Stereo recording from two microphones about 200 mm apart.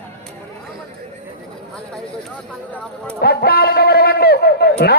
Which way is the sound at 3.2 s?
55° left (ahead or behind).